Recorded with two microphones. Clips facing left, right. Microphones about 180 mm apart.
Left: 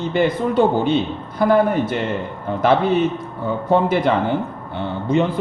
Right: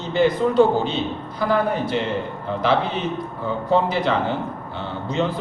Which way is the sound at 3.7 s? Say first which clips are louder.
Left 3 dB; 50° left (ahead or behind).